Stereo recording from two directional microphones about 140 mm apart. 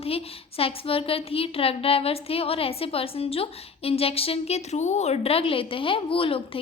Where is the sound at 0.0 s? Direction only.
45° left (ahead or behind).